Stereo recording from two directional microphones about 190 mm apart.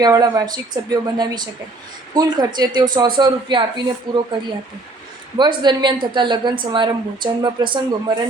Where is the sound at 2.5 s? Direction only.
20° right (ahead or behind).